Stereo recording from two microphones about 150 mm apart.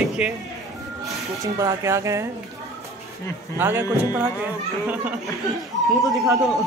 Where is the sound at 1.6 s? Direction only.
20° right (ahead or behind).